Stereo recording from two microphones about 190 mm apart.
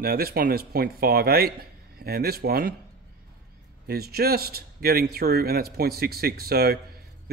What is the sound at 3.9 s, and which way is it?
Speech, 55° right (ahead or behind).